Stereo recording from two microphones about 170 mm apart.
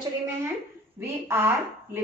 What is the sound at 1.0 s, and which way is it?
Speech, 15° right (ahead or behind).